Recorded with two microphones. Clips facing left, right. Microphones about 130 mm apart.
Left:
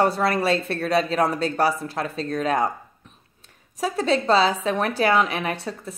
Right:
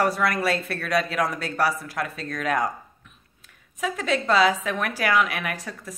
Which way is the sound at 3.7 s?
35° left (ahead or behind).